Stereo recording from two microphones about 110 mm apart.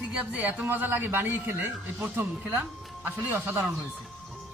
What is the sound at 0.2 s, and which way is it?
A man's voice, 15° right (ahead or behind).